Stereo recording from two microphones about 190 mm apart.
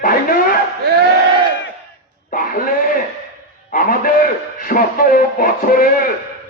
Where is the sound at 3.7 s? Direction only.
50° left (ahead or behind).